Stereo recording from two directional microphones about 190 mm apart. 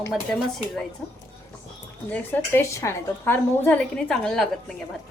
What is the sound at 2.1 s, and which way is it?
A woman's voice, 10° left (ahead or behind).